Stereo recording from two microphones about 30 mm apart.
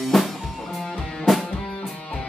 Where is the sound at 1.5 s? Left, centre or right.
Left.